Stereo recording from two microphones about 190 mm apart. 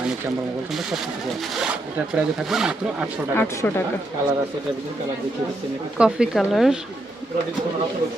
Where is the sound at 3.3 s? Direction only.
15° left (ahead or behind).